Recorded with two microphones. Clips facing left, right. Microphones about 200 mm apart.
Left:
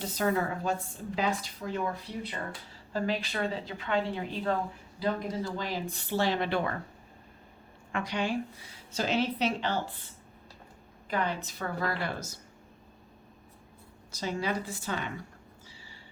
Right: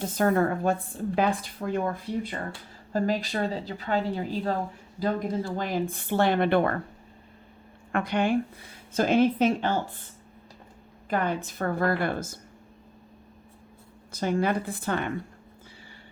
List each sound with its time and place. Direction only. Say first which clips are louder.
0.0 s a woman's voice: right 6 dB; 50° right (ahead or behind)
4.9 s a woman's voice: right 4 dB; 50° right (ahead or behind)
7.9 s a woman's voice: right 6 dB; 55° right (ahead or behind)
11.1 s a woman's voice: right 4 dB; 50° right (ahead or behind)
14.1 s a woman's voice: right 7 dB; 55° right (ahead or behind)